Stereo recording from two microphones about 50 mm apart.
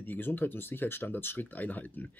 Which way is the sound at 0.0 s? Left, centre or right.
Left.